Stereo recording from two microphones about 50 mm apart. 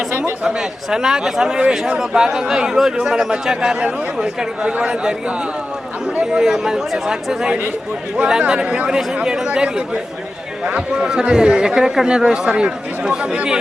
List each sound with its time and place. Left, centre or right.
0.4 s speech: centre
6.4 s speech: centre